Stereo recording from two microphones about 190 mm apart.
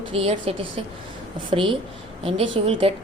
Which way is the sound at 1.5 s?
25° right (ahead or behind).